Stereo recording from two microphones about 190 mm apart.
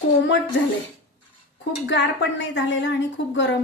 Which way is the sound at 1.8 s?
65° left (ahead or behind).